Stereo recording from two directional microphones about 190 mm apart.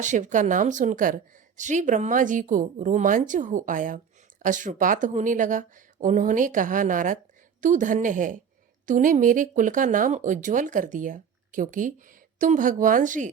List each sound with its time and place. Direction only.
0.0 s speech: 40° right (ahead or behind)